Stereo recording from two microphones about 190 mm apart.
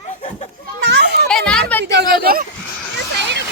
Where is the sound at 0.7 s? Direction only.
65° right (ahead or behind).